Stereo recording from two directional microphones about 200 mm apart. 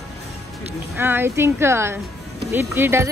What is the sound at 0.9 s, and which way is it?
Speech, 10° right (ahead or behind).